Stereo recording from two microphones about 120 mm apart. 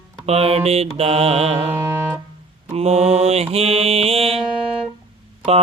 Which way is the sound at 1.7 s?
20° right (ahead or behind).